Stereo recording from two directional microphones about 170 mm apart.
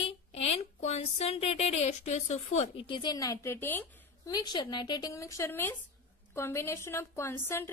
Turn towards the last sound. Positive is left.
turn(degrees=15)  # may be behind; listen again after turning